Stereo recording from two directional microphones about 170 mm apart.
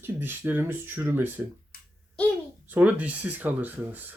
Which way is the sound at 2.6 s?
10° right (ahead or behind).